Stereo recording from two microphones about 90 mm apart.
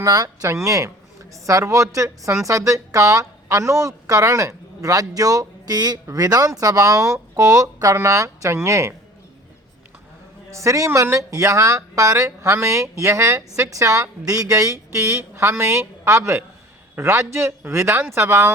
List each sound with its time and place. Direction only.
0.0 s speech: 40° right (ahead or behind)
10.5 s speech: 35° right (ahead or behind)